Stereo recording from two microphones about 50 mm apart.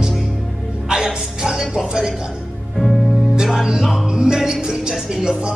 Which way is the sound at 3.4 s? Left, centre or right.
Centre.